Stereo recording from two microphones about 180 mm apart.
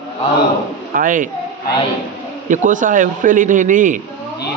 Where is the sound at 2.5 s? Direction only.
45° right (ahead or behind).